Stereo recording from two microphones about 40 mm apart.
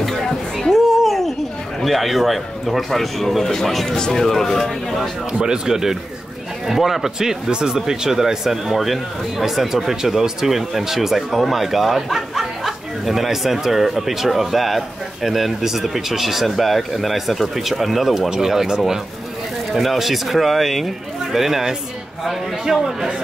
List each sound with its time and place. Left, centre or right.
0.0 s a sound: centre
1.9 s speech: centre
5.4 s speech: centre